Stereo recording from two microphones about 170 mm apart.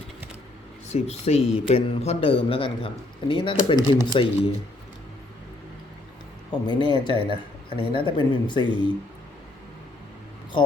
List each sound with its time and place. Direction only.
0.9 s speech: 40° left (ahead or behind)
6.5 s speech: 25° left (ahead or behind)